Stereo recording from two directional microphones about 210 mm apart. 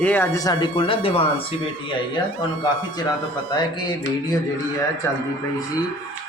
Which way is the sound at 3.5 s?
20° left (ahead or behind).